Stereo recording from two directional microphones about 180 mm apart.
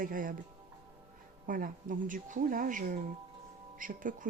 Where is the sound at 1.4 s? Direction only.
50° right (ahead or behind).